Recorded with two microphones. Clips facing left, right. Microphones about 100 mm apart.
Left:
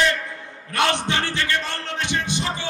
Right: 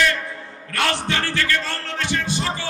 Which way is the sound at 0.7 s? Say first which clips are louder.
Left 1 dB; 20° left (ahead or behind).